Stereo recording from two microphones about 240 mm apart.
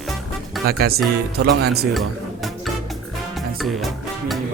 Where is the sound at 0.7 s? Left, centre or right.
Right.